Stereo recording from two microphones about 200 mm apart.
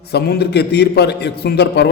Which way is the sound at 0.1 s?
55° left (ahead or behind).